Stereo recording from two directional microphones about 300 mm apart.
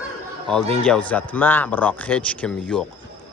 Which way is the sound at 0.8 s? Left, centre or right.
Centre.